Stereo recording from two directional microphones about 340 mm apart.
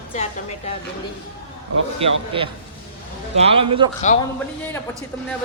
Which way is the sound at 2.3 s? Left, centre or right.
Centre.